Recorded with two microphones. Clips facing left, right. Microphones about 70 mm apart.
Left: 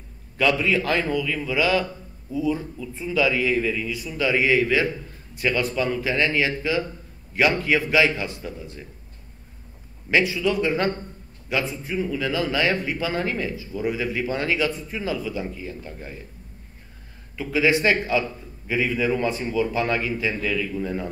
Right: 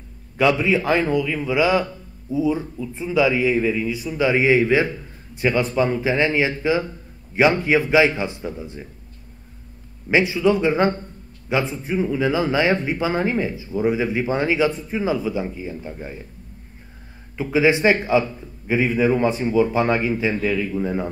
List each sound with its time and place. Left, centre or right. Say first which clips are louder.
0.4 s a man's voice: right 3 dB; right
10.1 s a man's voice: right 4 dB; right
17.4 s a man's voice: right 3 dB; right